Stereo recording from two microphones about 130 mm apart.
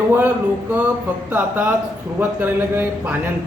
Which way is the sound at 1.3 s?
15° right (ahead or behind).